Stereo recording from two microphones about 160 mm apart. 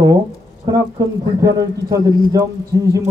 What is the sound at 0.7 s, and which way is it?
A man's voice, 25° right (ahead or behind).